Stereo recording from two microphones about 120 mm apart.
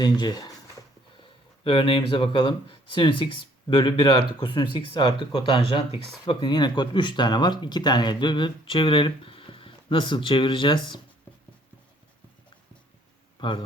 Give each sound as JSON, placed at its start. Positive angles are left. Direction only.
{"t": 0.0, "sound": "speech", "side_deg": 35}
{"t": 1.6, "sound": "speech", "side_deg": 45}
{"t": 6.2, "sound": "speech", "side_deg": 40}